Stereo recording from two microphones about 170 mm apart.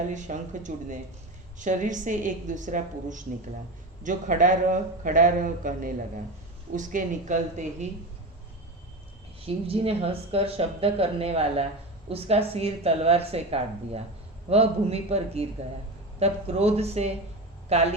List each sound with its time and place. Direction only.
0.1 s a man's voice: 45° right (ahead or behind)
9.5 s speech: 35° right (ahead or behind)